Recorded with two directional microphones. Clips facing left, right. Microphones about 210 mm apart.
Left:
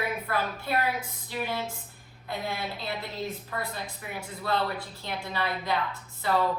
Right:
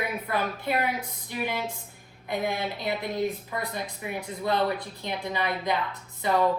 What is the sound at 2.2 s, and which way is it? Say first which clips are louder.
A woman's voice: right 5 dB; 15° right (ahead or behind).